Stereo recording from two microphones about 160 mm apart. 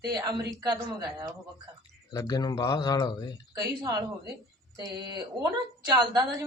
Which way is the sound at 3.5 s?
25° right (ahead or behind).